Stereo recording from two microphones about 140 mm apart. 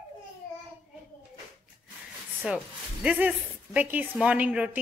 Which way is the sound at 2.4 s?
10° right (ahead or behind).